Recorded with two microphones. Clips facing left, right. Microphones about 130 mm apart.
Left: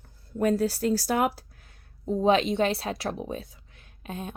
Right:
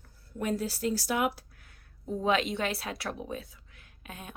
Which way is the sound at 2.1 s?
25° left (ahead or behind).